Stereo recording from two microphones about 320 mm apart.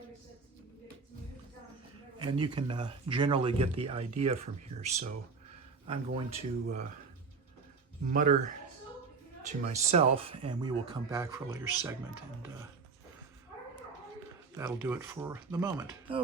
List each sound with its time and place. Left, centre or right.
2.1 s speech: centre
8.1 s speech: right
9.7 s speech: centre
14.5 s speech: centre